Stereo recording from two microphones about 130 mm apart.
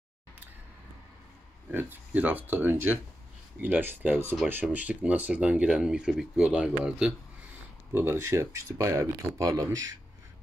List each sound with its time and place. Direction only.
1.7 s speech: 15° right (ahead or behind)
7.9 s speech: 15° right (ahead or behind)